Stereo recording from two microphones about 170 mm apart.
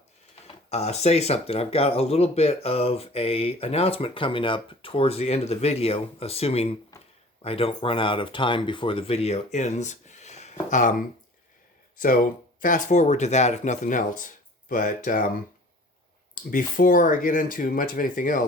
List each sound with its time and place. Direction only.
0.4 s speech: 40° left (ahead or behind)
16.3 s speech: 55° left (ahead or behind)